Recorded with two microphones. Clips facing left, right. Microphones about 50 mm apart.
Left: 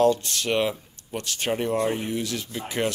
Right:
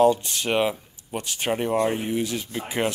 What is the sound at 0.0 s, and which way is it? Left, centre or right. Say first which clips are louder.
Speech: right 2 dB; centre.